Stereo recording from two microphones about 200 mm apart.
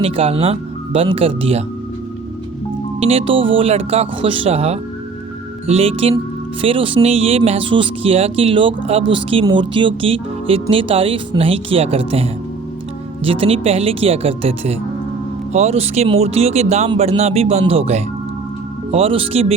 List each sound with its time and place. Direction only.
0.0 s speech: 30° right (ahead or behind)
3.0 s speech: 30° right (ahead or behind)